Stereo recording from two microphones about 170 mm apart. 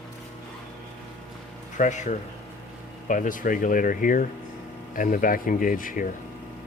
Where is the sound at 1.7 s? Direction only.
45° left (ahead or behind).